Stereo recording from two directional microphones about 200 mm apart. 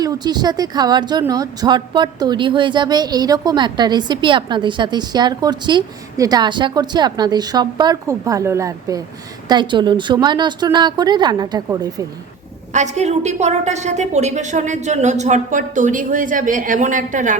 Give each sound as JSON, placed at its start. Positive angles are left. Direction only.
{"t": 0.0, "sound": "speech", "side_deg": -20}
{"t": 12.7, "sound": "a woman's voice", "side_deg": -35}